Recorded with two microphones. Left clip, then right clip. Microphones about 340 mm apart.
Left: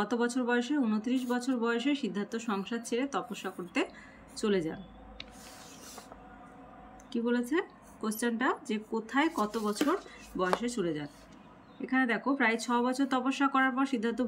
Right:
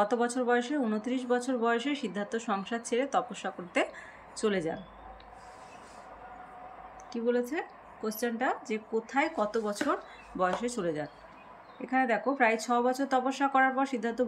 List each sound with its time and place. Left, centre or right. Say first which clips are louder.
0.0 s speech: right 3 dB; centre
7.1 s speech: right 2 dB; centre